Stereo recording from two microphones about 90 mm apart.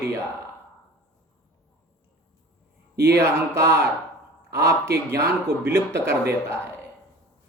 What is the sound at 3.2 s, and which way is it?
Speech, 30° right (ahead or behind).